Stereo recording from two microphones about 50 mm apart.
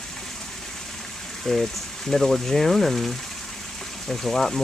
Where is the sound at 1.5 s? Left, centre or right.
Centre.